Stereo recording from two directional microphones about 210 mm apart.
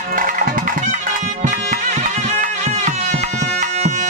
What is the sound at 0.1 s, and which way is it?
Music, 40° right (ahead or behind).